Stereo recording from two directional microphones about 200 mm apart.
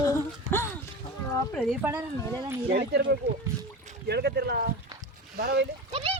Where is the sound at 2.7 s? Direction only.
55° right (ahead or behind).